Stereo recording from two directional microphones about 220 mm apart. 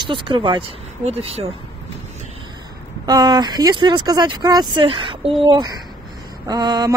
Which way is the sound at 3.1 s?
15° right (ahead or behind).